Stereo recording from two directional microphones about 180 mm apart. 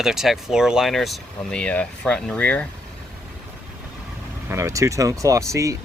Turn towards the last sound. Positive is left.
turn(degrees=-15)  # may be behind; listen again after turning